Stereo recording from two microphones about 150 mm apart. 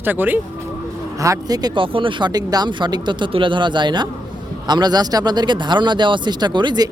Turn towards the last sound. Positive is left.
turn(degrees=-30)  # may be behind; listen again after turning